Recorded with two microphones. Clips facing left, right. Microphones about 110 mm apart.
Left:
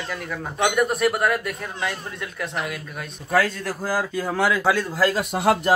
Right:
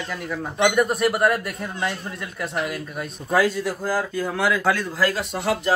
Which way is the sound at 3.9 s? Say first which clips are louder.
Left 2 dB; 10° left (ahead or behind).